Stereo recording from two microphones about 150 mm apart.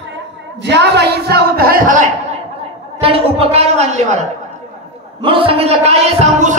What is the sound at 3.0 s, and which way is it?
A man's voice, 40° right (ahead or behind).